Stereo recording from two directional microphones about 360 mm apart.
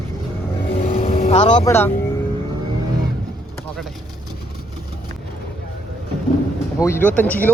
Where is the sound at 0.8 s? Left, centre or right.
Centre.